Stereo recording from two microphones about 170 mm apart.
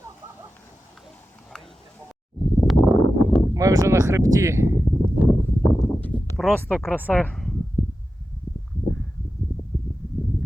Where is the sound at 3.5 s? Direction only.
20° right (ahead or behind).